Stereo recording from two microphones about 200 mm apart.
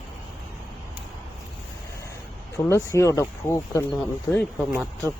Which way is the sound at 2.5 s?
15° left (ahead or behind).